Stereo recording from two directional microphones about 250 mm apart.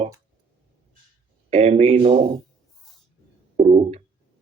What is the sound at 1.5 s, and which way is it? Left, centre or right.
Speech, right.